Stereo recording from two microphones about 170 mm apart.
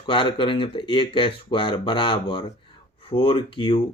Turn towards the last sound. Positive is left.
turn(degrees=30)  # may be behind; listen again after turning